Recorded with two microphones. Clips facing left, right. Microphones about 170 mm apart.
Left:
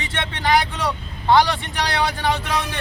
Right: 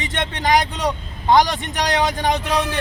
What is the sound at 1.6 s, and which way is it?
Speech, 45° right (ahead or behind).